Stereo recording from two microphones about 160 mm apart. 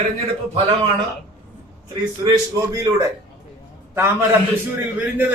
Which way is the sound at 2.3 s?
20° right (ahead or behind).